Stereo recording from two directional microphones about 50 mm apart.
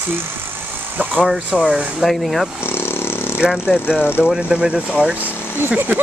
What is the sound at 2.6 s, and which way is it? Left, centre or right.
Vehicle, left.